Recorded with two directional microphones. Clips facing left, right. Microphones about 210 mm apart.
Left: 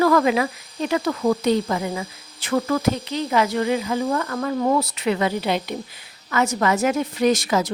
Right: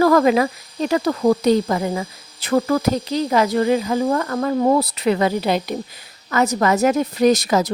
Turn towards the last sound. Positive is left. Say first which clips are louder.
# right 3 dB
turn(degrees=-40)  # may be behind; listen again after turning